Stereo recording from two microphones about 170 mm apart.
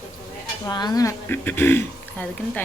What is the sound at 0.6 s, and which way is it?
Speech, 25° left (ahead or behind).